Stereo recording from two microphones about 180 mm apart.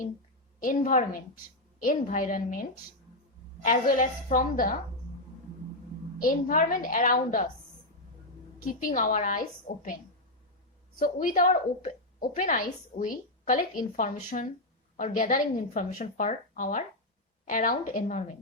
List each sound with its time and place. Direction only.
0.6 s a woman's voice: 50° left (ahead or behind)
6.1 s a woman's voice: 50° left (ahead or behind)
8.5 s a woman's voice: 50° left (ahead or behind)